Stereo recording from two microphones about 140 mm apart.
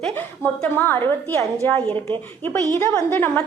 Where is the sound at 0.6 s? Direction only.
15° left (ahead or behind).